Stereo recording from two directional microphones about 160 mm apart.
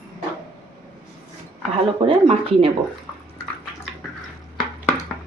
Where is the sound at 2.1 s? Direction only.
35° right (ahead or behind).